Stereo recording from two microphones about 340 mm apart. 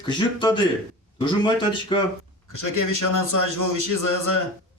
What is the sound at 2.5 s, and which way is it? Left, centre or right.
A man's voice, left.